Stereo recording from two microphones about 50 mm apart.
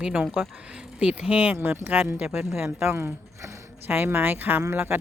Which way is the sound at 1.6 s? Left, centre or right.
Right.